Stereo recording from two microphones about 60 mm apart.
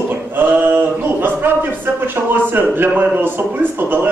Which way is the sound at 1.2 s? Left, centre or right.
Right.